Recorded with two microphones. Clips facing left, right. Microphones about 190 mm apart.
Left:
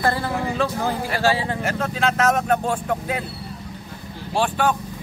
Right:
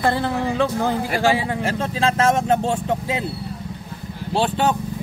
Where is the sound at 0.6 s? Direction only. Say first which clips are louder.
Right 3 dB; 15° right (ahead or behind).